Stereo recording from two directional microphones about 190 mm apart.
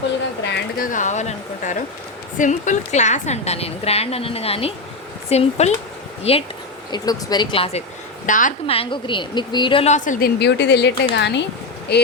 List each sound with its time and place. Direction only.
0.4 s a sound: 60° left (ahead or behind)
0.9 s a woman's voice: 40° left (ahead or behind)
6.9 s speech: 20° left (ahead or behind)
8.3 s a woman's voice: 45° left (ahead or behind)
8.6 s a woman's voice: 30° left (ahead or behind); by 12.0 s 60° left (ahead or behind)